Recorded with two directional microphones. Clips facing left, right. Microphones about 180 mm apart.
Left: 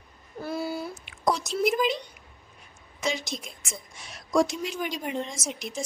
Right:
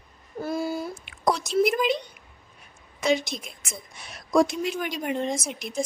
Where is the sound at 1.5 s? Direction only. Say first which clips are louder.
Right 4 dB; centre (ahead or behind).